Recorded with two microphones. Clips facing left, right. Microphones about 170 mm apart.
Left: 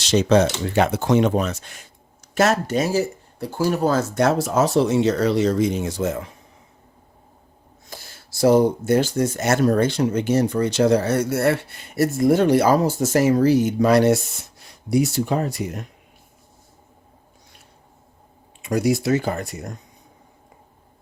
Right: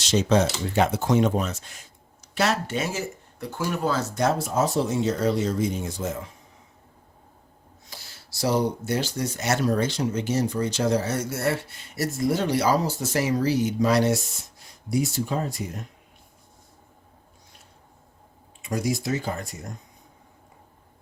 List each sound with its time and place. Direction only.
0.0 s speech: 75° left (ahead or behind)
2.3 s speech: 45° left (ahead or behind)
4.1 s speech: 70° left (ahead or behind)
7.9 s speech: 50° left (ahead or behind)
14.8 s speech: 70° left (ahead or behind)
18.6 s speech: 70° left (ahead or behind)